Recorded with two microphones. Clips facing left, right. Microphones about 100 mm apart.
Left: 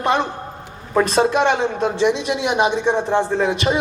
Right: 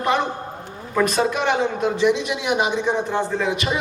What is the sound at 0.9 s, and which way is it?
A man's voice, 35° left (ahead or behind).